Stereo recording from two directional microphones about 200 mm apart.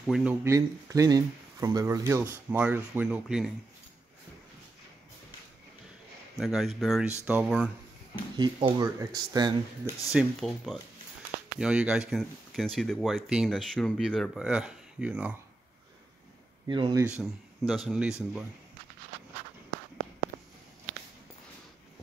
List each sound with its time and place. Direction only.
0.0 s speech: 5° right (ahead or behind)
6.3 s speech: centre (ahead or behind)
8.4 s speech: 25° right (ahead or behind)
10.1 s speech: centre (ahead or behind)
16.6 s speech: 20° right (ahead or behind)
17.2 s speech: centre (ahead or behind)